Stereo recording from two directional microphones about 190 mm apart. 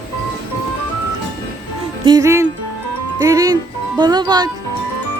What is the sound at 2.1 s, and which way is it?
Speech, 15° right (ahead or behind).